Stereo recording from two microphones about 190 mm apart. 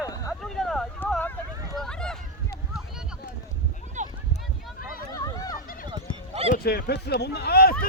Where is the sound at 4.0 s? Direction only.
40° right (ahead or behind).